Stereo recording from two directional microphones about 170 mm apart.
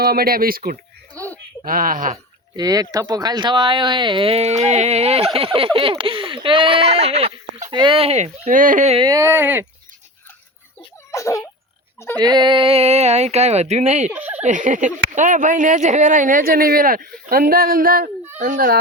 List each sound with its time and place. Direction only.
0.0 s speech: 65° right (ahead or behind)
1.2 s a sound: 20° right (ahead or behind)
1.6 s speech: 55° right (ahead or behind)
2.6 s speech: 20° right (ahead or behind); by 9.0 s 45° right (ahead or behind)
9.0 s speech: 20° right (ahead or behind)
10.8 s a sound: 20° left (ahead or behind)
11.9 s speech: 15° left (ahead or behind)
12.2 s speech: 25° right (ahead or behind); by 14.1 s 40° right (ahead or behind)
14.1 s speech: 10° right (ahead or behind)
14.4 s speech: 45° right (ahead or behind)